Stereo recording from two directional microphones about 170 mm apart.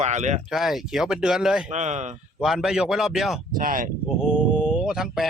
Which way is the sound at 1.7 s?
45° right (ahead or behind).